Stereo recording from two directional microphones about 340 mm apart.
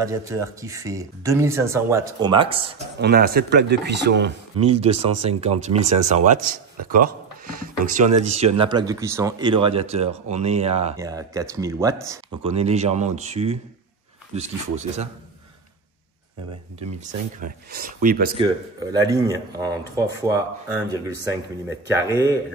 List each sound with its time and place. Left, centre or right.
0.0 s speech: centre
3.0 s speech: right
4.6 s speech: centre
17.0 s speech: right
18.4 s speech: centre